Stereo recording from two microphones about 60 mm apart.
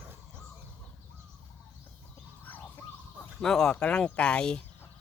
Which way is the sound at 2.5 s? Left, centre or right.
Left.